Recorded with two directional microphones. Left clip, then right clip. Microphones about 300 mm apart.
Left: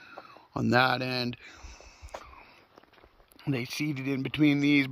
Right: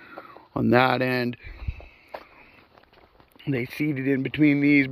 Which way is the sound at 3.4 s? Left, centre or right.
Centre.